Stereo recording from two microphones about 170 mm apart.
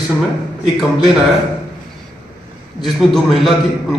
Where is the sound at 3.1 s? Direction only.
Centre (ahead or behind).